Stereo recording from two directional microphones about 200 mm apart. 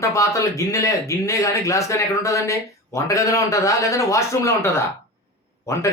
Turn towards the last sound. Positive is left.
turn(degrees=15)  # may be behind; listen again after turning